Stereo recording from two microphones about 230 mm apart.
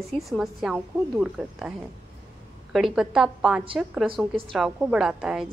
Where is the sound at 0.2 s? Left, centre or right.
Centre.